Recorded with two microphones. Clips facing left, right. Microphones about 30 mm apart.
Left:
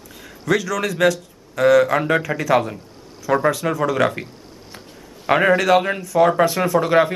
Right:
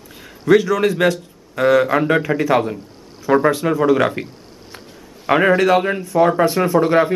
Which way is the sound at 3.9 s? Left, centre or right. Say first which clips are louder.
Right 2 dB; centre.